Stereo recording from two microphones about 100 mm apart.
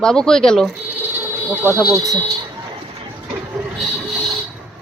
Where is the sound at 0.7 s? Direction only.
15° right (ahead or behind).